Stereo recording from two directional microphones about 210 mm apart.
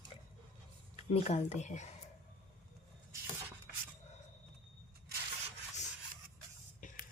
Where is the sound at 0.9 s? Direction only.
30° left (ahead or behind).